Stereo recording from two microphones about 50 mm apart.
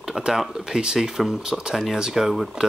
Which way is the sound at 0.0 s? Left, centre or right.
Centre.